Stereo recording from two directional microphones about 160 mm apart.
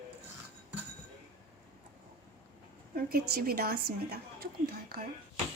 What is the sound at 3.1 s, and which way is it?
A woman's voice, 70° right (ahead or behind).